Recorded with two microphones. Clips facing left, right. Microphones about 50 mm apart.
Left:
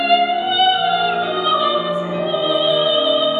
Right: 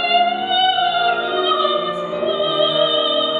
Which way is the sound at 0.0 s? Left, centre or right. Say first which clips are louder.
Left 1 dB; centre.